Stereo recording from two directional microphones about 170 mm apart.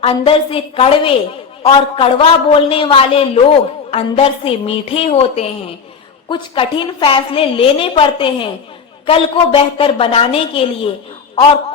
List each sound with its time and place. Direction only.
0.0 s a woman's voice: 35° left (ahead or behind)